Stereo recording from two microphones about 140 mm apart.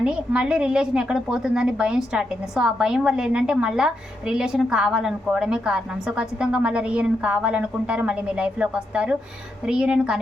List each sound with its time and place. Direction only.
0.0 s a woman's voice: 5° right (ahead or behind)